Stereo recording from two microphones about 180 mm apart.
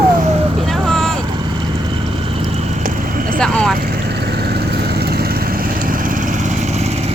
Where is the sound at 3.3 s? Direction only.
5° left (ahead or behind).